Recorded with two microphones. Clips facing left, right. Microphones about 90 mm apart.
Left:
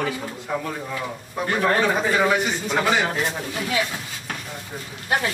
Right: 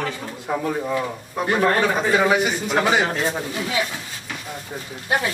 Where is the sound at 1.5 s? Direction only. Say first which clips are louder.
Right 1 dB; centre (ahead or behind).